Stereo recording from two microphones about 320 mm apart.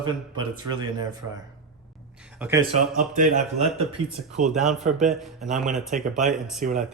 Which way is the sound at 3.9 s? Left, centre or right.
Centre.